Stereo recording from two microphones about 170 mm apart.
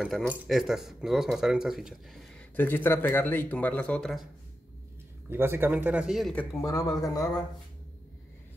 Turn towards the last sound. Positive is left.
turn(degrees=20)  # may be behind; listen again after turning